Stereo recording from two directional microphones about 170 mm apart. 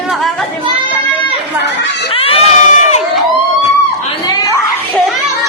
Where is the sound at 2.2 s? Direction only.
35° left (ahead or behind).